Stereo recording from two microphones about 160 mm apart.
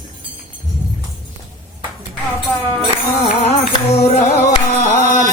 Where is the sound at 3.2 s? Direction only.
45° left (ahead or behind).